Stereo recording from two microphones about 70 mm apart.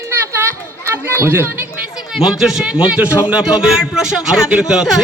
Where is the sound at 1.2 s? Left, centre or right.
Right.